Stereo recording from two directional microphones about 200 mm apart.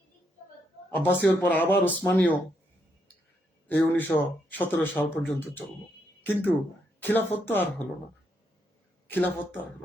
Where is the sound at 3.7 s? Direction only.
10° left (ahead or behind).